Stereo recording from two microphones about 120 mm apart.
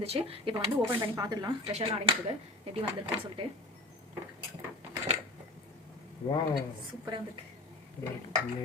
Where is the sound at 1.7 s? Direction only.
50° right (ahead or behind).